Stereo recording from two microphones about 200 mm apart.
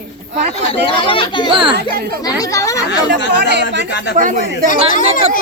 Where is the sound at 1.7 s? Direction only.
50° right (ahead or behind).